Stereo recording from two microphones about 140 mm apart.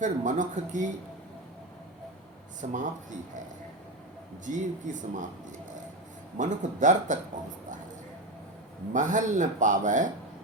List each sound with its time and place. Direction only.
0.0 s a man's voice: 60° right (ahead or behind)
2.6 s speech: 65° right (ahead or behind)
4.4 s a man's voice: 65° right (ahead or behind)
6.3 s a man's voice: 60° right (ahead or behind)
8.9 s a man's voice: 65° right (ahead or behind)